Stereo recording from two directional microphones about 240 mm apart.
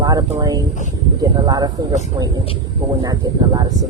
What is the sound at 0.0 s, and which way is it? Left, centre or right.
Speech, centre.